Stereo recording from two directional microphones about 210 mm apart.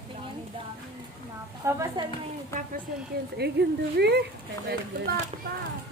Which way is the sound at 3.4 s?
50° right (ahead or behind).